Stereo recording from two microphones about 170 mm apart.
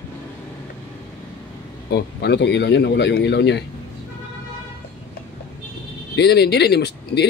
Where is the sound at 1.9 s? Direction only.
85° left.